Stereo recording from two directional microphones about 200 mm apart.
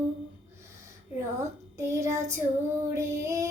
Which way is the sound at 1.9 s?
15° right (ahead or behind).